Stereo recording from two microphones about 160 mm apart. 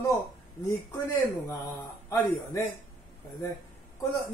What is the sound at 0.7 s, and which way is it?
Speech, 25° left (ahead or behind).